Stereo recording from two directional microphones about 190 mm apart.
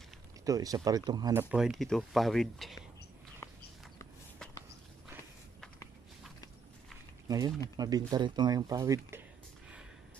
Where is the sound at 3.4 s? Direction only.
15° left (ahead or behind).